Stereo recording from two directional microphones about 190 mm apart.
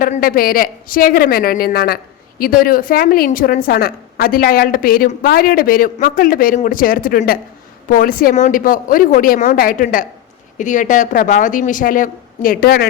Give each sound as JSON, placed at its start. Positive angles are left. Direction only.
{"t": 0.0, "sound": "a woman's voice", "side_deg": 45}